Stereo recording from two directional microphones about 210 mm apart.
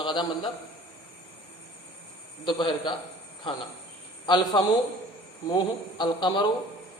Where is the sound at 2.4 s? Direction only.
20° left (ahead or behind).